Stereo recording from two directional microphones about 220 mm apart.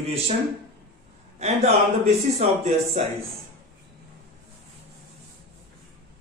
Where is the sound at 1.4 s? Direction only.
30° right (ahead or behind).